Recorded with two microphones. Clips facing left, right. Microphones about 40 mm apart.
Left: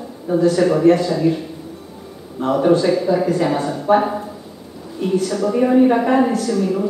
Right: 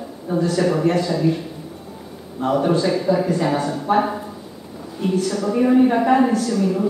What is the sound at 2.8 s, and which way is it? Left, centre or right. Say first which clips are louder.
A woman's voice: left 2 dB; centre.